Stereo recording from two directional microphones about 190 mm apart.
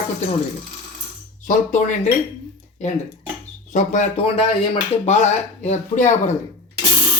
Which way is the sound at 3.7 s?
40° left (ahead or behind).